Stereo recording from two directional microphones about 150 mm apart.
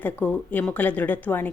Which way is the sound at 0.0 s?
10° left (ahead or behind).